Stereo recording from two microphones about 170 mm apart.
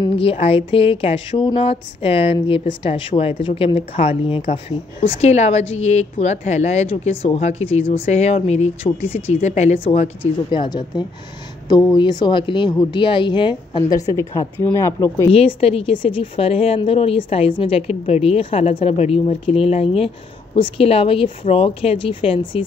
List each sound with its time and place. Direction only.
0.2 s speech: 35° left (ahead or behind)
10.2 s speech: 30° left (ahead or behind)
15.3 s speech: 35° left (ahead or behind)